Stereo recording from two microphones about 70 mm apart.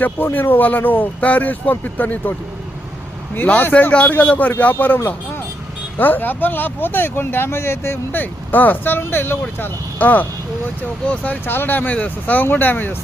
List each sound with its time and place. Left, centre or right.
0.0 s speech: left
3.3 s speech: left
6.0 s speech: left
8.2 s speech: left
11.4 s speech: left